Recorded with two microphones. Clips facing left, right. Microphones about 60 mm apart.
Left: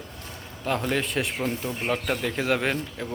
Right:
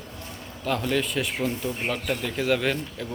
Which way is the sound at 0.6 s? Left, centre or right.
Left.